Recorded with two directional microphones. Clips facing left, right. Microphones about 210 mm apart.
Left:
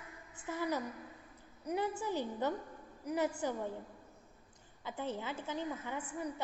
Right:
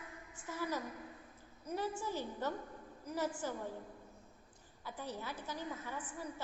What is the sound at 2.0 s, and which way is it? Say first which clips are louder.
A woman's voice: left 4 dB; 20° left (ahead or behind).